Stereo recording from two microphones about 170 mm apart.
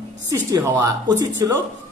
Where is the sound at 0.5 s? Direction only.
20° right (ahead or behind).